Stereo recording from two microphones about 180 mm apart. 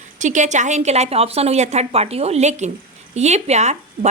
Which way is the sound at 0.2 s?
40° right (ahead or behind).